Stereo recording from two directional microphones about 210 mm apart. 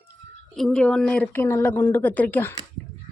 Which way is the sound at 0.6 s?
Centre (ahead or behind).